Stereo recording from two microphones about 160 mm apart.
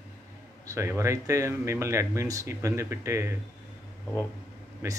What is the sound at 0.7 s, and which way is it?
Speech, 15° right (ahead or behind).